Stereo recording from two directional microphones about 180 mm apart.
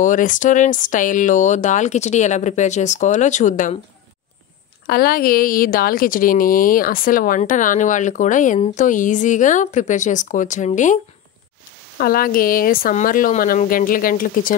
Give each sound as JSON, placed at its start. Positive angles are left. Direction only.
{"t": 0.0, "sound": "a woman's voice", "side_deg": 45}
{"t": 4.8, "sound": "a woman's voice", "side_deg": 55}
{"t": 12.0, "sound": "a woman's voice", "side_deg": 55}